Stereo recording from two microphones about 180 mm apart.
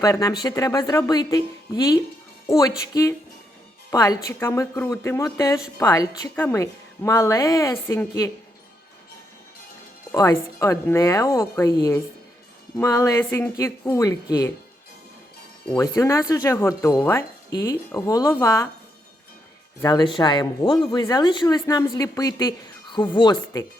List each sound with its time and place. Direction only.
0.0 s a woman's voice: 20° left (ahead or behind)
10.1 s a woman's voice: 20° left (ahead or behind)
15.8 s a woman's voice: 15° left (ahead or behind)
19.8 s speech: 20° left (ahead or behind)